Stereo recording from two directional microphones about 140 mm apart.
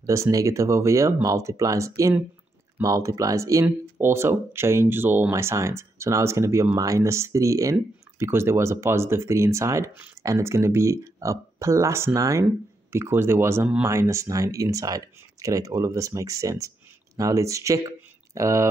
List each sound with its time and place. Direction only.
0.0 s speech: 25° right (ahead or behind)